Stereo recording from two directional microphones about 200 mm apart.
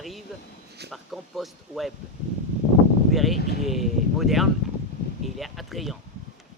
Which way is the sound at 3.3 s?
50° left (ahead or behind).